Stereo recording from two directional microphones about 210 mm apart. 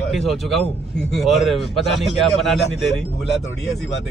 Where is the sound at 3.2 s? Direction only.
55° left (ahead or behind).